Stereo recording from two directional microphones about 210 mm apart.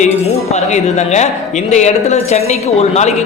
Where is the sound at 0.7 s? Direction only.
35° left (ahead or behind).